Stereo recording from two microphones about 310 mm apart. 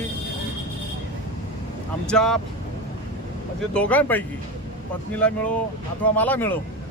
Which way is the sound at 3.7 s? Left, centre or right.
Centre.